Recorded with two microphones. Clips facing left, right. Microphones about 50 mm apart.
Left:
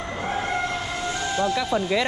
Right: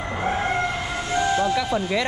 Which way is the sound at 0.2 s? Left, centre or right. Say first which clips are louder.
Right 3 dB; centre.